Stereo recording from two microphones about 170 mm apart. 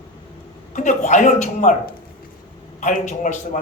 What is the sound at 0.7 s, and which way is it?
A man's voice, 45° left (ahead or behind).